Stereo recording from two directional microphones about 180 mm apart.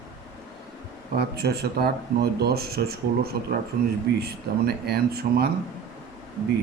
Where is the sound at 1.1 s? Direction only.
65° right (ahead or behind).